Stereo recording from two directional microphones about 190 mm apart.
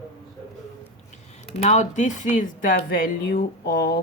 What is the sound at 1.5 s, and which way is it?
Speech, 35° left (ahead or behind).